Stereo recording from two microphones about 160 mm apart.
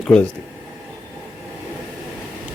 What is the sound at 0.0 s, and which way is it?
Speech, 5° left (ahead or behind).